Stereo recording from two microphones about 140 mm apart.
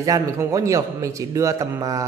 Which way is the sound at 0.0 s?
25° right (ahead or behind).